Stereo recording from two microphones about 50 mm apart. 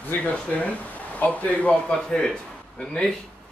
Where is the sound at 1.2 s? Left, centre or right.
Left.